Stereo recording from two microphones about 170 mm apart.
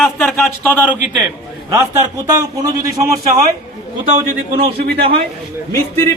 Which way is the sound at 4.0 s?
55° right (ahead or behind).